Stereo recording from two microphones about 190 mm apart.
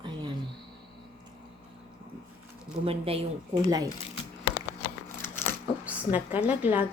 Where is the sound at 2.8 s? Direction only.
30° right (ahead or behind).